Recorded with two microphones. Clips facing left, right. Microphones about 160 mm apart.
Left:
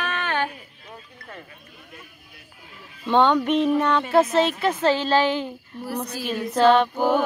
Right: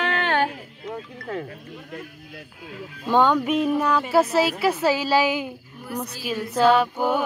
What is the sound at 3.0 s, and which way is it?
Speech, 5° right (ahead or behind).